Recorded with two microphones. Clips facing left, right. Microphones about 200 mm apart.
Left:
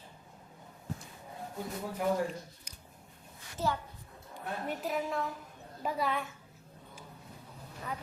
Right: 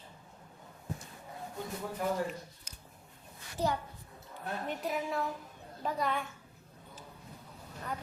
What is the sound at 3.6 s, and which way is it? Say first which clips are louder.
Speech: right 1 dB; 15° right (ahead or behind).